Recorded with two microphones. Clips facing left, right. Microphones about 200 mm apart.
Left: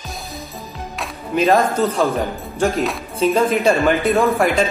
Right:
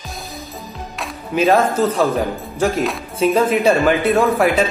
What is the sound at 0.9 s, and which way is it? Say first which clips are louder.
Music: even; centre (ahead or behind).